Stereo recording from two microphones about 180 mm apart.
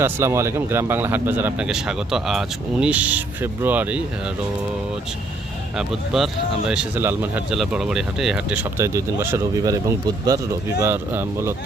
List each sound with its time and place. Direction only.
0.0 s speech: 15° right (ahead or behind)
5.7 s speech: centre (ahead or behind)
8.8 s speech: 15° right (ahead or behind)